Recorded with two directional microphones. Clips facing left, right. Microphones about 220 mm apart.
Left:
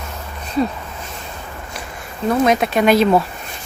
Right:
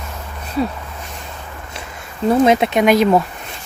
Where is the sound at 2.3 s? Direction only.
25° right (ahead or behind).